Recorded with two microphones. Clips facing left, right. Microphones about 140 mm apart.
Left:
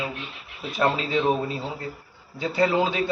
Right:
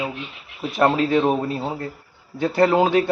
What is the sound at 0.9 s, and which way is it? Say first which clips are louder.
A man's voice: right 5 dB; 55° right (ahead or behind).